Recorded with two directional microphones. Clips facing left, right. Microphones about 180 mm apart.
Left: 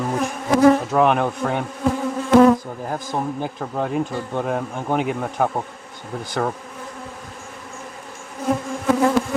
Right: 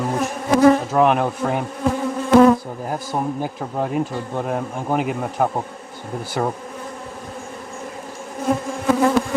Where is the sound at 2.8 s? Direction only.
10° right (ahead or behind).